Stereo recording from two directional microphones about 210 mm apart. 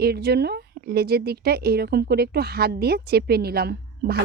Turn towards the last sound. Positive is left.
turn(degrees=-50)  # may be behind; listen again after turning